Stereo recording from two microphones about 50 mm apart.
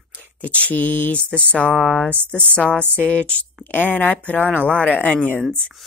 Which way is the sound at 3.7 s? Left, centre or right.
Left.